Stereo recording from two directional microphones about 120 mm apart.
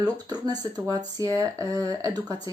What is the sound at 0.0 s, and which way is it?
Speech, 35° right (ahead or behind).